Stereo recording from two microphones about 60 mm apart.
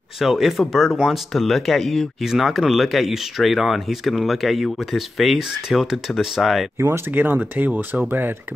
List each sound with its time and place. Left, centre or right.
0.2 s speech: centre
7.1 s speech: right